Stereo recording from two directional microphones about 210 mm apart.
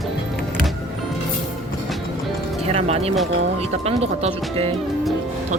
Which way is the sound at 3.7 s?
30° right (ahead or behind).